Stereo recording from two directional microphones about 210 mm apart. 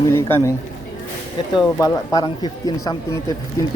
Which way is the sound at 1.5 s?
20° left (ahead or behind).